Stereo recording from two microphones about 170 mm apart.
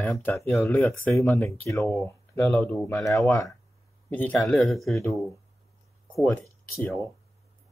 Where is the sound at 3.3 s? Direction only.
20° left (ahead or behind); by 4.7 s 5° left (ahead or behind).